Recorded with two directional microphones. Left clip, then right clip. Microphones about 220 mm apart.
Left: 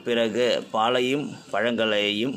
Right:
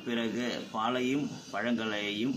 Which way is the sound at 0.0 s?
50° left (ahead or behind).